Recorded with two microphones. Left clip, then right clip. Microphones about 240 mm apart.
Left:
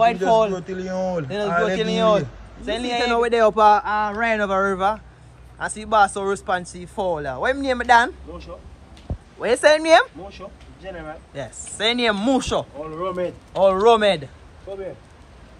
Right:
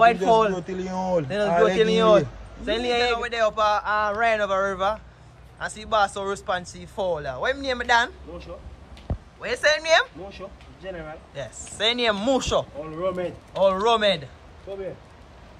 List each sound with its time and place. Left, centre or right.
0.0 s speech: centre
11.3 s speech: centre
12.9 s speech: centre
13.6 s speech: centre
14.7 s speech: centre